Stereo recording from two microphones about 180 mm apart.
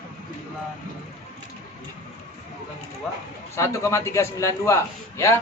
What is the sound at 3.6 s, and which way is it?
A man's voice, 15° left (ahead or behind).